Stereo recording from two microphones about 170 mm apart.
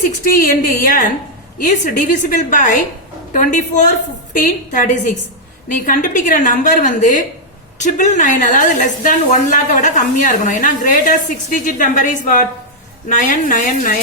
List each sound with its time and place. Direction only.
0.3 s a woman's voice: 55° left (ahead or behind)